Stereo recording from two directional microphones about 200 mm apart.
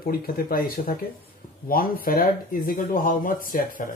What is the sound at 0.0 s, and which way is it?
Speech, 50° left (ahead or behind).